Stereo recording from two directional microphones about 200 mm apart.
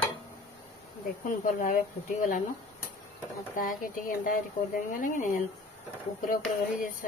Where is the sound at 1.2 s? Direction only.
45° left (ahead or behind).